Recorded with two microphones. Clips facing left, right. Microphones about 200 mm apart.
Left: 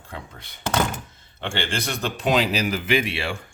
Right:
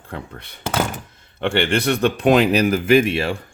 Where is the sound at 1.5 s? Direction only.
60° right (ahead or behind); by 3.4 s 40° right (ahead or behind).